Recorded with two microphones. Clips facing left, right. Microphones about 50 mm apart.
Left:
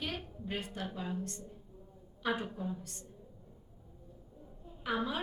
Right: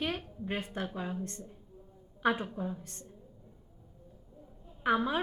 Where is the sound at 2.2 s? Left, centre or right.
Right.